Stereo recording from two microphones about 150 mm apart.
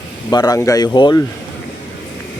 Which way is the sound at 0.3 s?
25° left (ahead or behind).